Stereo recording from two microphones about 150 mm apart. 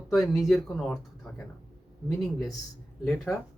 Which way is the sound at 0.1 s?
Centre (ahead or behind).